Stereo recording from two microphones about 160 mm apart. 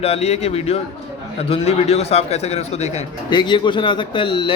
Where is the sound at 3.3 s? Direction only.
30° left (ahead or behind).